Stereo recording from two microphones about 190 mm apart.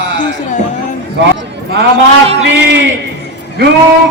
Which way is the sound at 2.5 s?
65° right (ahead or behind).